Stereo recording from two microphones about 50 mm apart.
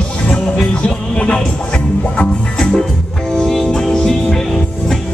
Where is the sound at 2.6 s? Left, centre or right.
Centre.